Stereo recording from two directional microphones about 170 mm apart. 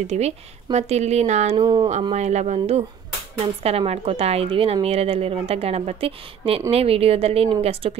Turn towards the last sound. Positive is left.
turn(degrees=-35)  # may be behind; listen again after turning